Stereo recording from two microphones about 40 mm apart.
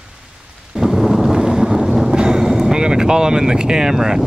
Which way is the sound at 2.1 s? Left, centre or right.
Right.